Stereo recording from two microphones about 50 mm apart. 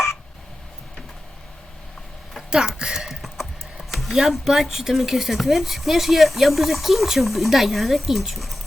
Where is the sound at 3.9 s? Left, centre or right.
Centre.